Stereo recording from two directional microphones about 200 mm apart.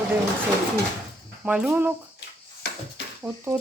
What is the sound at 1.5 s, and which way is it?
Speech, 5° right (ahead or behind).